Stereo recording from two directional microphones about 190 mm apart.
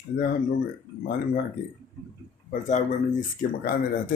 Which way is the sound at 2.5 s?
40° left (ahead or behind).